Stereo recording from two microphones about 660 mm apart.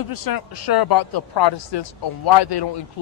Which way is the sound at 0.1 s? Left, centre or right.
Left.